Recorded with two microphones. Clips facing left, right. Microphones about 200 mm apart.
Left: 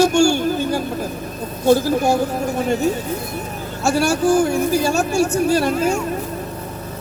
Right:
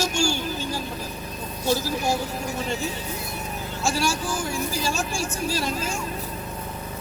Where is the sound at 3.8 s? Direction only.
60° left (ahead or behind).